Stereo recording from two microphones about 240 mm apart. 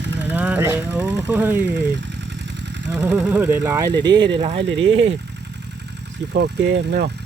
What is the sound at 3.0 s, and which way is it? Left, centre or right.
Speech, centre.